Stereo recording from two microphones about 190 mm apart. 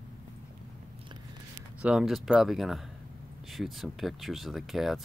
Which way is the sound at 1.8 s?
5° right (ahead or behind).